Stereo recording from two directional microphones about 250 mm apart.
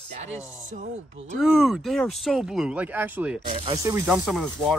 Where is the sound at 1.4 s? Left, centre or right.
Centre.